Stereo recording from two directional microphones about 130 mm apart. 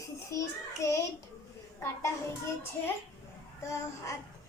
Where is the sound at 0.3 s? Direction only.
25° left (ahead or behind).